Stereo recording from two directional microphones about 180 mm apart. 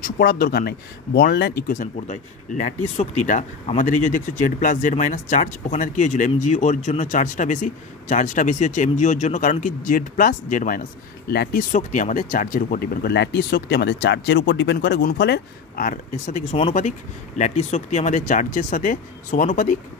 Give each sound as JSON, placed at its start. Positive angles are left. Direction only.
{"t": 0.0, "sound": "speech", "side_deg": 55}
{"t": 1.7, "sound": "speech", "side_deg": 45}
{"t": 11.2, "sound": "speech", "side_deg": 65}
{"t": 11.7, "sound": "speech", "side_deg": 45}